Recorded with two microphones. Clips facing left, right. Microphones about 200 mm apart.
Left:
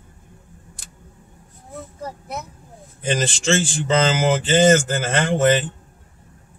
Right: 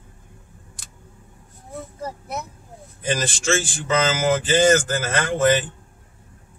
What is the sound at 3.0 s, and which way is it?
Speech, 30° left (ahead or behind).